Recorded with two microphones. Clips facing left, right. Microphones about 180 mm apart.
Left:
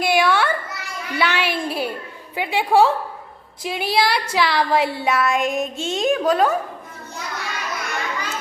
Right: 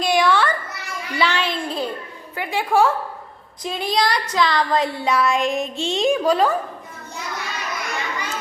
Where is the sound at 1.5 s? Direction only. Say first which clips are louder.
Left 1 dB; 10° left (ahead or behind).